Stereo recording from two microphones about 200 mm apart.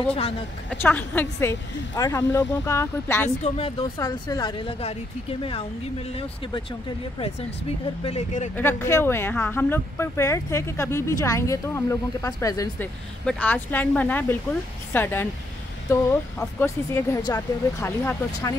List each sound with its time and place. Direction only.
0.7 s speech: 10° left (ahead or behind)
3.4 s a woman's voice: 25° left (ahead or behind)
8.0 s a woman's voice: 30° left (ahead or behind)
8.5 s speech: 10° left (ahead or behind)